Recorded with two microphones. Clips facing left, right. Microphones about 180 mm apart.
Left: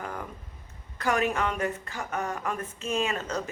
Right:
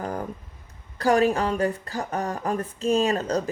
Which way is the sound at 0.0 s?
35° right (ahead or behind).